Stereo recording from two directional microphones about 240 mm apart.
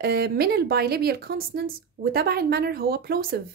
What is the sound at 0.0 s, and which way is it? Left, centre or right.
A woman's voice, right.